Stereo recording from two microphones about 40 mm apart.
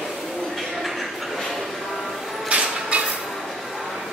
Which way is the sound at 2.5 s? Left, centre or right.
Right.